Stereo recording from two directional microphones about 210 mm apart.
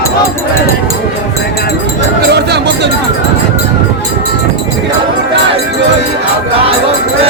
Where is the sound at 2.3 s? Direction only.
55° right (ahead or behind).